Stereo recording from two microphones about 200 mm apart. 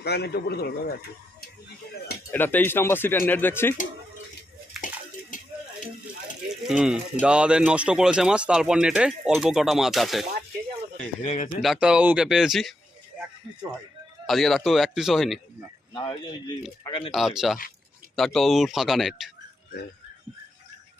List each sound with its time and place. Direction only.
0.0 s speech: 55° left (ahead or behind)
2.3 s speech: 10° left (ahead or behind)
5.3 s a sound: 40° left (ahead or behind)
6.5 s speech: centre (ahead or behind)
11.2 s speech: 40° left (ahead or behind)
11.6 s speech: centre (ahead or behind)
14.3 s speech: centre (ahead or behind)
15.9 s speech: 25° left (ahead or behind)
17.1 s speech: centre (ahead or behind)